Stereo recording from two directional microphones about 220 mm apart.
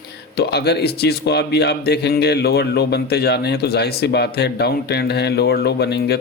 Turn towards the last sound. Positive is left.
turn(degrees=45)  # may be behind; listen again after turning